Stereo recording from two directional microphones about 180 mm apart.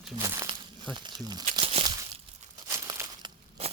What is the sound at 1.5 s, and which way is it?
Crumpling, 30° right (ahead or behind).